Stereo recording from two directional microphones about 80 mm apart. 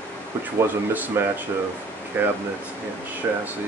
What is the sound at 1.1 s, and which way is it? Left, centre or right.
Speech, right.